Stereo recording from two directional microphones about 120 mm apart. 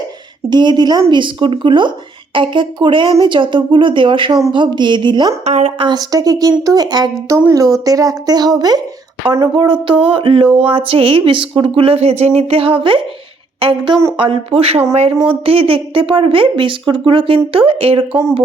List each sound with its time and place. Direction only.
0.5 s speech: 40° right (ahead or behind)
5.5 s speech: 70° right (ahead or behind)
5.8 s speech: 35° right (ahead or behind)
9.4 s speech: 45° right (ahead or behind)
10.4 s a sound: 15° right (ahead or behind)
10.7 s speech: 50° right (ahead or behind)